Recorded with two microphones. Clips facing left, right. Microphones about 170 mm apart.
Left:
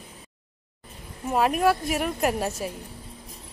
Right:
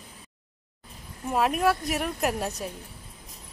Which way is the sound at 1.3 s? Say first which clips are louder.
Left 2 dB; centre (ahead or behind).